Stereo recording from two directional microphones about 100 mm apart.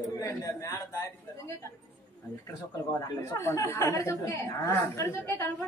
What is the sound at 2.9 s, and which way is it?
Speech, 30° left (ahead or behind).